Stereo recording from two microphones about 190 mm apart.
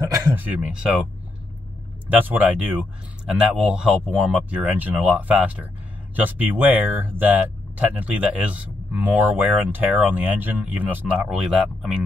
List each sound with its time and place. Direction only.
0.4 s speech: 5° right (ahead or behind)
2.1 s speech: 10° right (ahead or behind)